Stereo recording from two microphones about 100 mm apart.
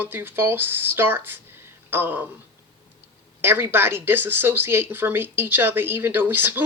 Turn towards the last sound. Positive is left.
turn(degrees=-20)  # may be behind; listen again after turning